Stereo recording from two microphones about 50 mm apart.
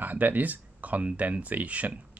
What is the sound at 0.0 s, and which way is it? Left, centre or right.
Speech, right.